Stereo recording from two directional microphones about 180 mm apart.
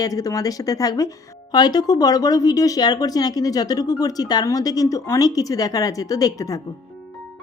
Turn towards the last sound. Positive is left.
turn(degrees=20)  # may be behind; listen again after turning